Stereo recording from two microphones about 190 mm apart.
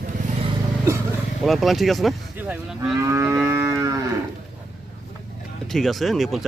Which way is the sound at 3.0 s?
15° right (ahead or behind).